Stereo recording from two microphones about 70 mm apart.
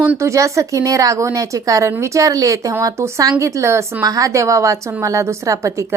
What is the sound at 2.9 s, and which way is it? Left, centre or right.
Speech, right.